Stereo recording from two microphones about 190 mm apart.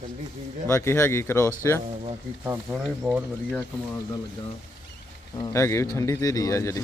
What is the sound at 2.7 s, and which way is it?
Speech, 5° right (ahead or behind).